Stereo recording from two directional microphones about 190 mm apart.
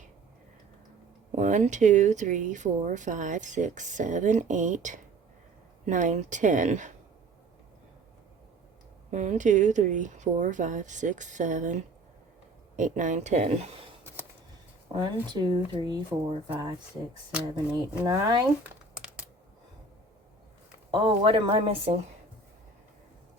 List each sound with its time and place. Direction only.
1.4 s speech: 40° right (ahead or behind)
9.0 s speech: 40° right (ahead or behind)
14.9 s speech: 25° right (ahead or behind)
16.0 s speech: 10° right (ahead or behind)
18.0 s speech: 20° right (ahead or behind)
20.9 s speech: 25° right (ahead or behind)